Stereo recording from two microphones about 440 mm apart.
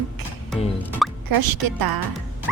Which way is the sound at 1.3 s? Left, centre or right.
Right.